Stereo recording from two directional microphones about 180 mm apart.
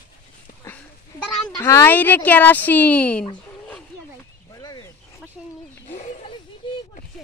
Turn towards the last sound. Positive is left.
turn(degrees=35)  # may be behind; listen again after turning